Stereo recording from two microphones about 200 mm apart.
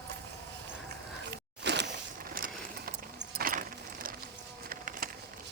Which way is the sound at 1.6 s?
60° right (ahead or behind).